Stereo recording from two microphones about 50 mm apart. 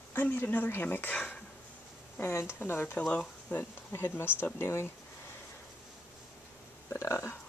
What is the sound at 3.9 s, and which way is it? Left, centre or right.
Speech, left.